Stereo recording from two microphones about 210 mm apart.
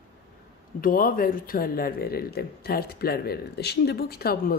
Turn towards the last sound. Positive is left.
turn(degrees=45)  # may be behind; listen again after turning